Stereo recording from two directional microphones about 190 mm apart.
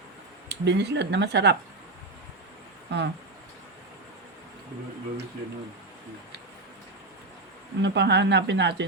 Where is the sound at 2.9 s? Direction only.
65° right (ahead or behind).